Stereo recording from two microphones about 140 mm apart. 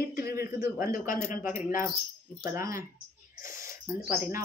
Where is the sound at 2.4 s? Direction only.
20° right (ahead or behind).